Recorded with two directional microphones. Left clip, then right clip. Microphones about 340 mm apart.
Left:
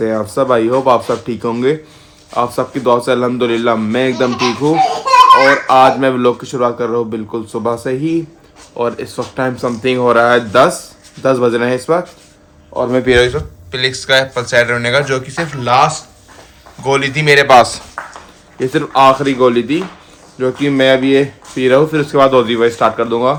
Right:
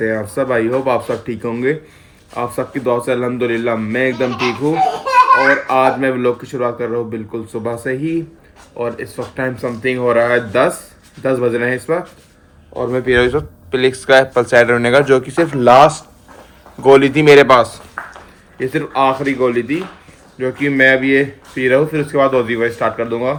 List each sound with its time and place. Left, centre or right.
0.0 s speech: centre
13.1 s speech: centre
18.0 s a sound: centre
18.6 s speech: centre